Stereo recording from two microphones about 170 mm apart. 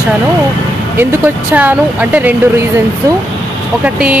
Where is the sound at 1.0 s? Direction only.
10° right (ahead or behind).